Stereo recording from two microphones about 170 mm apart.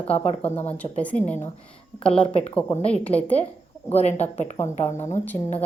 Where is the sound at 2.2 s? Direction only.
35° left (ahead or behind).